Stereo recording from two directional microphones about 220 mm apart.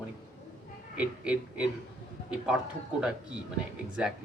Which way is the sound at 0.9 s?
5° right (ahead or behind).